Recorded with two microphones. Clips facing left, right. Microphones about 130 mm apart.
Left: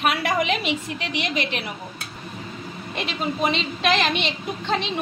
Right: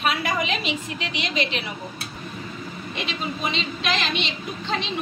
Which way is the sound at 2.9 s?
55° left (ahead or behind).